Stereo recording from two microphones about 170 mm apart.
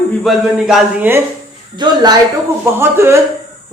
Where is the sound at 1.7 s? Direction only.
25° right (ahead or behind).